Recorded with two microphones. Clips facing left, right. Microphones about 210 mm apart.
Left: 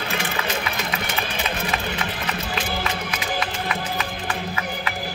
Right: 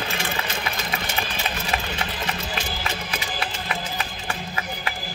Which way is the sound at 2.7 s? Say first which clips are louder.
Left 3 dB; 60° left (ahead or behind).